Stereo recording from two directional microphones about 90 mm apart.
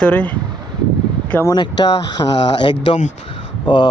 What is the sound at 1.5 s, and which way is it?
Speech, 55° left (ahead or behind).